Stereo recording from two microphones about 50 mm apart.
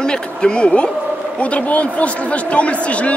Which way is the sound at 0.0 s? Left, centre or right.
Centre.